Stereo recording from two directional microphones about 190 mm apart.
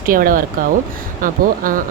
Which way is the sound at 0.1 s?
45° right (ahead or behind).